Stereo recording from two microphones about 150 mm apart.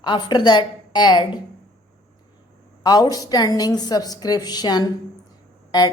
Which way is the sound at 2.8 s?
25° left (ahead or behind).